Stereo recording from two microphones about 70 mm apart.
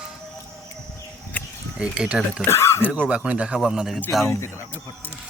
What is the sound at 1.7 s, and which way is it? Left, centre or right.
Speech, centre.